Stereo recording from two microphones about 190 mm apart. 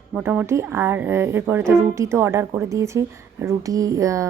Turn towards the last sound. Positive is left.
turn(degrees=-15)  # may be behind; listen again after turning